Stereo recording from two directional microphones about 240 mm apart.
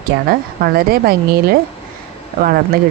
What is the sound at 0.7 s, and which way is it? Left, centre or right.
Speech, right.